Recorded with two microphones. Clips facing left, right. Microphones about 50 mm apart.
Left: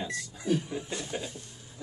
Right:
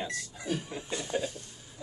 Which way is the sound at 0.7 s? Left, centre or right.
Centre.